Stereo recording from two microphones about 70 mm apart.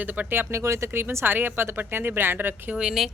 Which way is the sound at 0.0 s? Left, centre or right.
Right.